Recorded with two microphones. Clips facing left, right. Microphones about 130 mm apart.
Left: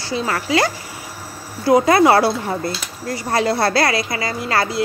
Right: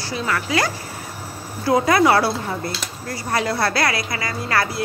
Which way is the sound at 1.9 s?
30° left (ahead or behind).